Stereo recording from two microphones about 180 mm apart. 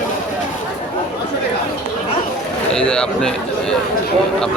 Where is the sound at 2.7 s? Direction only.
5° left (ahead or behind).